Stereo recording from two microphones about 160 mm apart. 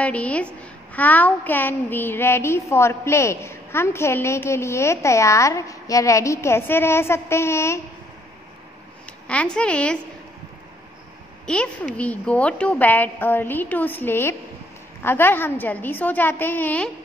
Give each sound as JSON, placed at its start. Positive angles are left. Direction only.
{"t": 0.0, "sound": "a woman's voice", "side_deg": 10}
{"t": 9.3, "sound": "a woman's voice", "side_deg": 5}
{"t": 11.4, "sound": "a woman's voice", "side_deg": 5}